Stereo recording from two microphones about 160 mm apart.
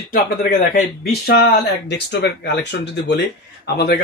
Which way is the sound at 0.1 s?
60° left (ahead or behind).